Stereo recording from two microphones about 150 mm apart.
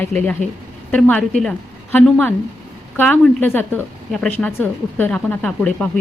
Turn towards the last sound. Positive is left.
turn(degrees=5)  # may be behind; listen again after turning